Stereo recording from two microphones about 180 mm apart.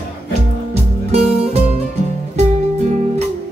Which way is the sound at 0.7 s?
35° right (ahead or behind).